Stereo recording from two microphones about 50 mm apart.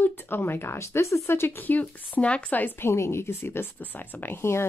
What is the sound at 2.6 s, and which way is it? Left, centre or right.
Child singing, left.